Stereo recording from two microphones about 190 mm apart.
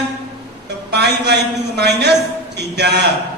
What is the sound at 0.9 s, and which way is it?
A man's voice, 60° right (ahead or behind).